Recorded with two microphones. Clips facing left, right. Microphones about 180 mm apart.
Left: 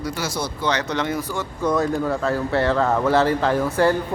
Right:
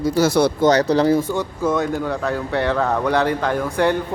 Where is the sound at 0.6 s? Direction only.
40° right (ahead or behind).